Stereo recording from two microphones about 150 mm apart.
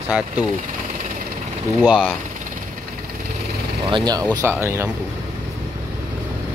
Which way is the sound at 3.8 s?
30° right (ahead or behind).